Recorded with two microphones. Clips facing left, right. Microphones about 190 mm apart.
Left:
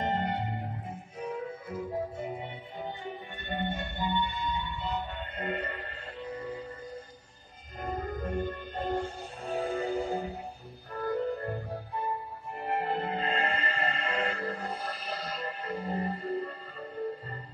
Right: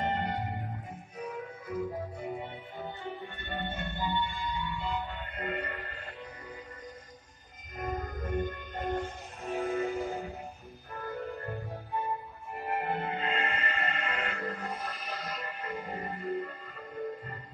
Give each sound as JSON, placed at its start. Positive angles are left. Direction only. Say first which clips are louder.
{"t": 1.2, "sound": "music", "louder": "left 3 dB", "side_deg": 25}
{"t": 7.8, "sound": "music", "louder": "left 2 dB", "side_deg": 35}
{"t": 12.5, "sound": "music", "louder": "left 2 dB", "side_deg": 35}